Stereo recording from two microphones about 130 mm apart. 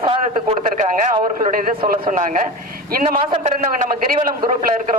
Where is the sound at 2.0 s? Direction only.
70° right (ahead or behind).